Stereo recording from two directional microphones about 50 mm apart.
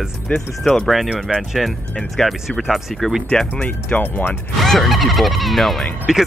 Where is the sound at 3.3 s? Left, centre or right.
Centre.